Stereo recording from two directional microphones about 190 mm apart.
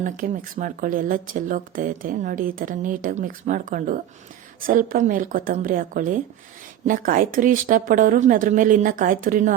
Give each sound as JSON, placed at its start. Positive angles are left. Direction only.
{"t": 0.0, "sound": "speech", "side_deg": -45}